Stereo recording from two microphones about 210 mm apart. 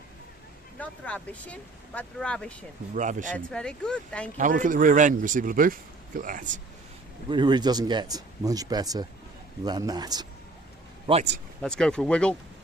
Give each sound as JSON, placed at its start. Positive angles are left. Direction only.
{"t": 0.8, "sound": "speech", "side_deg": 5}
{"t": 2.9, "sound": "speech", "side_deg": -35}
{"t": 3.3, "sound": "speech", "side_deg": 5}
{"t": 4.4, "sound": "speech", "side_deg": -40}
{"t": 7.3, "sound": "speech", "side_deg": -20}
{"t": 11.6, "sound": "speech", "side_deg": 5}